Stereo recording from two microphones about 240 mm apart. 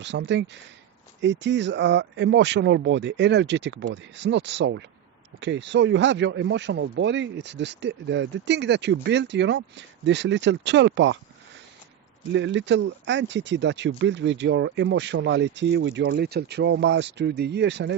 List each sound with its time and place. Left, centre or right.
0.0 s speech: right
12.3 s speech: right